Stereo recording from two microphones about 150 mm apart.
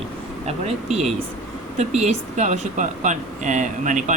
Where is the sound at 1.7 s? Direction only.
50° right (ahead or behind).